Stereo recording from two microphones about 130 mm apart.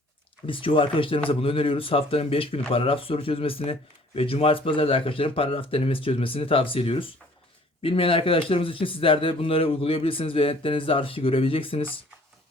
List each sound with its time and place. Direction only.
0.4 s speech: 45° left (ahead or behind)